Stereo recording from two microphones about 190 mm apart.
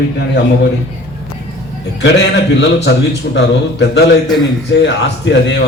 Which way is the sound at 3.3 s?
65° left (ahead or behind).